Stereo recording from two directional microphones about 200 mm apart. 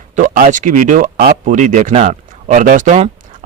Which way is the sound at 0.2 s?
40° right (ahead or behind).